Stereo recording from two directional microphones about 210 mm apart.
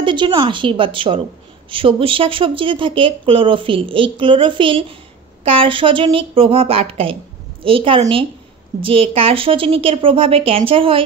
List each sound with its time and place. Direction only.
0.0 s speech: 25° right (ahead or behind)